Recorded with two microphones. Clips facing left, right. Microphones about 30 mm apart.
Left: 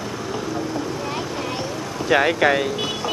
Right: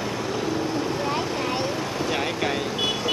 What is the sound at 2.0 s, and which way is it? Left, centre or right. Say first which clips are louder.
Speech: left 11 dB; left.